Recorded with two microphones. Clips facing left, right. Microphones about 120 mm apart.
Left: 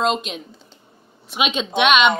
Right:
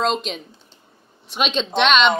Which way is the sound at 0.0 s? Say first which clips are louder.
Left 1 dB; centre (ahead or behind).